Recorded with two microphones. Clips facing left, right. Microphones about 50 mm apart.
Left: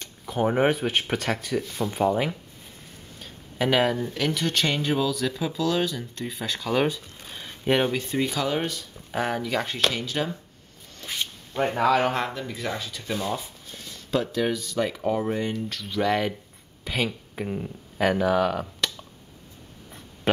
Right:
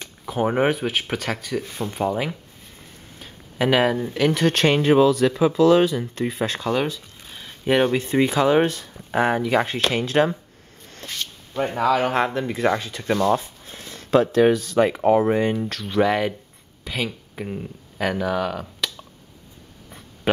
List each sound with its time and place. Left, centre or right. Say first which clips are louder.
0.0 s speech: right 2 dB; centre
4.3 s speech: right 8 dB; right
5.6 s speech: right 9 dB; right
6.2 s speech: right 6 dB; right
6.7 s a sound: right 1 dB; centre
8.0 s speech: right 7 dB; right
8.9 s speech: right 6 dB; right
9.8 s speech: right 7 dB; right
11.5 s speech: right 1 dB; centre
12.4 s speech: right 9 dB; right
13.7 s a sound: right 3 dB; right
13.9 s speech: right 9 dB; right
15.2 s speech: right 7 dB; right
16.0 s speech: right 4 dB; centre